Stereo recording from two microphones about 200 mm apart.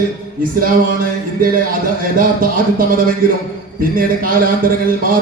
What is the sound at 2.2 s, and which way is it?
A man's voice, 45° right (ahead or behind).